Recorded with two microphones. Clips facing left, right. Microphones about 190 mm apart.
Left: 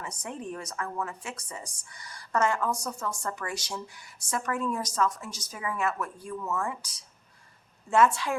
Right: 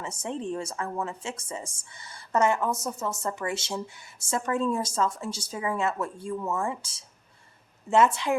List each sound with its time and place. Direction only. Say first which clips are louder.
0.0 s speech: right 5 dB; 25° right (ahead or behind)